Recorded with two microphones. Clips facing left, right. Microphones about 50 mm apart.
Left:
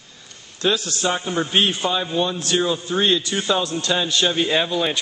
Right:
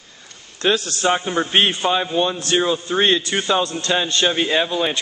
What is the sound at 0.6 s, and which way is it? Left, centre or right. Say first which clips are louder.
Speech: right 2 dB; right.